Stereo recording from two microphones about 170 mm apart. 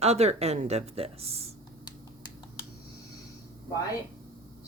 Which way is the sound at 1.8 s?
25° left (ahead or behind).